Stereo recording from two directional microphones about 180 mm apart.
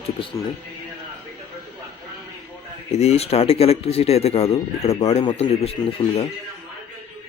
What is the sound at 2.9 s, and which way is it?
Speech, 35° left (ahead or behind).